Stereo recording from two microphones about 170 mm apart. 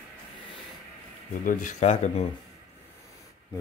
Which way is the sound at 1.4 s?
50° left (ahead or behind).